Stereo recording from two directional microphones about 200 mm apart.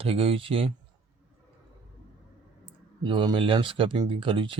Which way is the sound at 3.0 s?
25° right (ahead or behind).